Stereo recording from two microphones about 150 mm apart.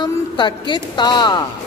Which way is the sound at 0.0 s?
30° left (ahead or behind).